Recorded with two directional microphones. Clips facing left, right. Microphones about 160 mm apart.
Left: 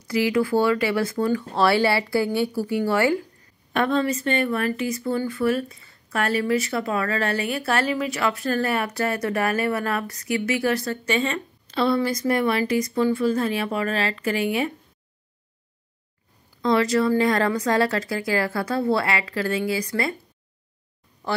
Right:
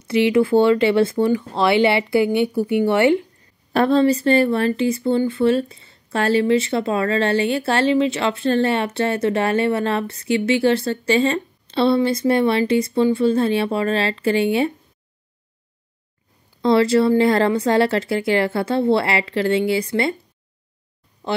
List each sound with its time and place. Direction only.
0.0 s speech: 25° right (ahead or behind)
16.6 s speech: 30° right (ahead or behind)
21.2 s speech: 20° right (ahead or behind)